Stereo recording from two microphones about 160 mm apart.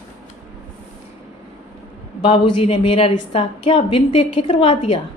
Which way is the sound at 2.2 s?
35° left (ahead or behind).